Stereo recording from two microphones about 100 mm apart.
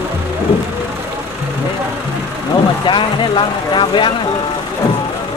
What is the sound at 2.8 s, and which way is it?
Speech, 55° left (ahead or behind).